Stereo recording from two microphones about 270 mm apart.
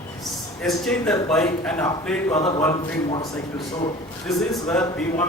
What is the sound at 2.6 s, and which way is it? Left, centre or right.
Speech, centre.